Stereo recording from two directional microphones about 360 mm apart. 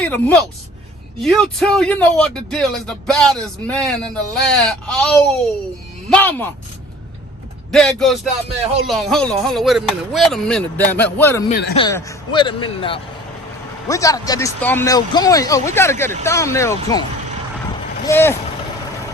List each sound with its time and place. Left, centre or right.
0.0 s speech: centre
7.7 s speech: centre
11.4 s a man's voice: left
11.8 s speech: centre